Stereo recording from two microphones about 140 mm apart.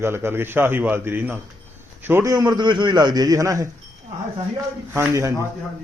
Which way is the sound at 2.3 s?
30° right (ahead or behind).